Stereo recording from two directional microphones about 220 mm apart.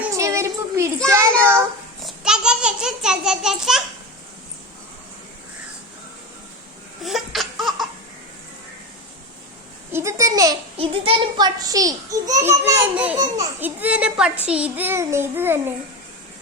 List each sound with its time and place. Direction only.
0.0 s a sound: 15° right (ahead or behind)
1.0 s a child's voice: 10° right (ahead or behind)
2.0 s a child's voice: centre (ahead or behind)
7.0 s laughter: centre (ahead or behind)
9.9 s a child's voice: 15° right (ahead or behind)